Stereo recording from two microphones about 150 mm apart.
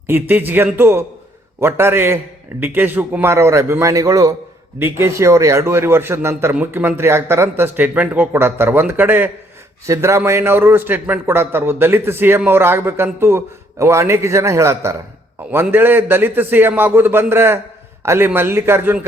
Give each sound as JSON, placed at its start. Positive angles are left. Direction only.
{"t": 0.1, "sound": "a man's voice", "side_deg": -15}